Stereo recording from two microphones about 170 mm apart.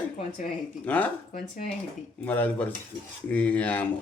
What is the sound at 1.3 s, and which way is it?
Speech, 45° left (ahead or behind).